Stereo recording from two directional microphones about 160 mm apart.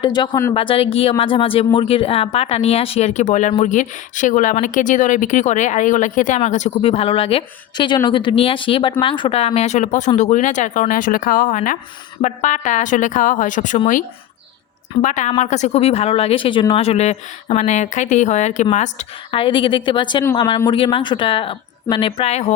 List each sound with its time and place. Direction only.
0.0 s speech: 30° left (ahead or behind); by 14.0 s 55° left (ahead or behind)
15.0 s speech: 50° left (ahead or behind)